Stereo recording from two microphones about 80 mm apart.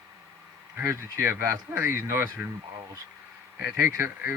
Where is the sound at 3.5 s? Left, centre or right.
Right.